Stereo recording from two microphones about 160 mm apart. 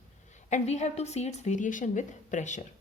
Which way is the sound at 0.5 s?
45° left (ahead or behind).